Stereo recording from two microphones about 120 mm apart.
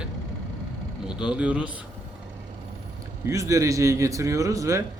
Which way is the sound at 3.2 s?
25° right (ahead or behind).